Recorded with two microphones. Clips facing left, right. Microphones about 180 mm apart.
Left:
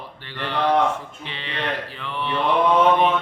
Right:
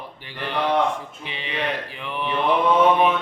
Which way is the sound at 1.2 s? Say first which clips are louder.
Right 3 dB; 15° right (ahead or behind).